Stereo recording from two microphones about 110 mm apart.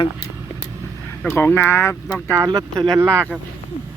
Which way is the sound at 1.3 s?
20° left (ahead or behind).